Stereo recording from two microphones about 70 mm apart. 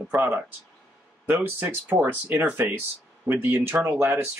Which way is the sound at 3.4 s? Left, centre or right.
Right.